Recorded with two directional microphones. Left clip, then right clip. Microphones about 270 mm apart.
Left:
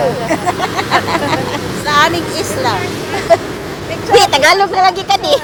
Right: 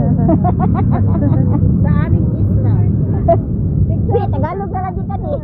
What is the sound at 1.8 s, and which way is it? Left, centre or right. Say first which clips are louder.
Vehicle: left 12 dB; left.